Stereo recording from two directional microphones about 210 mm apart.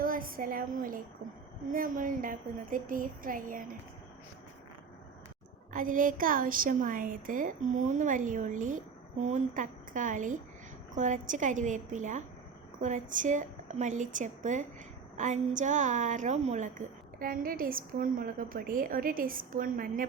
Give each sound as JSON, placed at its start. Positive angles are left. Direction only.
{"t": 0.0, "sound": "a woman's voice", "side_deg": -40}
{"t": 5.7, "sound": "a woman's voice", "side_deg": -40}